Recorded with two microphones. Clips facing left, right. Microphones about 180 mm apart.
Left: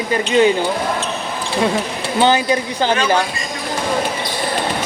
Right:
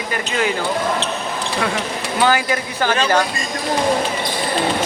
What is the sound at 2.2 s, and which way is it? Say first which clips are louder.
Speech: left 3 dB; 20° left (ahead or behind).